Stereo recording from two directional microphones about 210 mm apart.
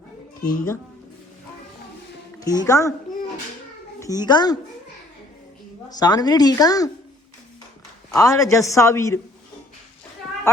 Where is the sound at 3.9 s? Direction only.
15° left (ahead or behind).